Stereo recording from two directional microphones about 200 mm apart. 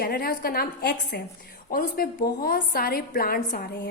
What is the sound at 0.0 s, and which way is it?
A woman's voice, 50° left (ahead or behind).